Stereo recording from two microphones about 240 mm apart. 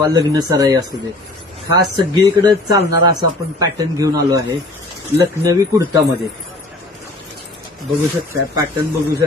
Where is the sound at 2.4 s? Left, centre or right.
Centre.